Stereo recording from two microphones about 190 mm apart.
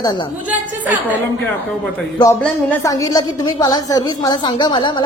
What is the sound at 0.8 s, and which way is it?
Speech, 10° right (ahead or behind).